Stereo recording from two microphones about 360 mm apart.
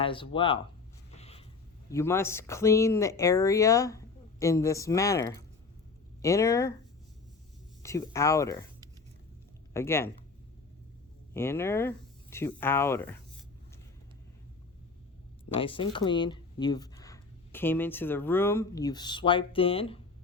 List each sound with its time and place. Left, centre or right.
0.0 s speech: centre
1.1 s a sound: centre
1.9 s speech: centre
7.8 s speech: centre
11.3 s speech: centre
15.5 s speech: centre